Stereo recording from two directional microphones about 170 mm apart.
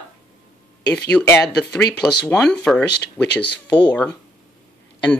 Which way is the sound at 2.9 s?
90° left.